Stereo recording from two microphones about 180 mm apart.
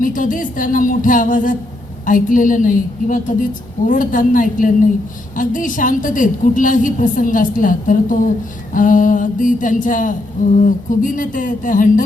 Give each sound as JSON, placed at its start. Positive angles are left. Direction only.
{"t": 0.0, "sound": "a woman's voice", "side_deg": 50}